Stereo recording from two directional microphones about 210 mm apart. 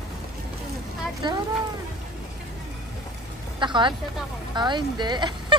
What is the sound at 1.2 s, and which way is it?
Speech, 20° right (ahead or behind).